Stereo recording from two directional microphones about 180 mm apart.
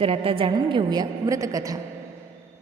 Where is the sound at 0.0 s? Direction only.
30° right (ahead or behind).